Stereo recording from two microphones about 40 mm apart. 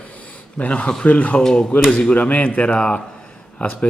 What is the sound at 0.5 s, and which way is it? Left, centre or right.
Speech, left.